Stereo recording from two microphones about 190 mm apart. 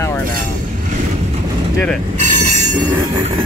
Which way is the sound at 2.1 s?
40° right (ahead or behind).